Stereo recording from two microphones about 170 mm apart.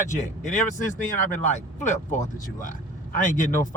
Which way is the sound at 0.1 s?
45° left (ahead or behind).